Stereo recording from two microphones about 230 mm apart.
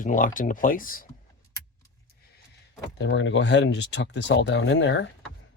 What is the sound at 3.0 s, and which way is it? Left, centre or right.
Speech, left.